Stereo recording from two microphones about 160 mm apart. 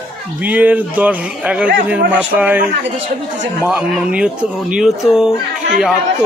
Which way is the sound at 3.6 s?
10° right (ahead or behind).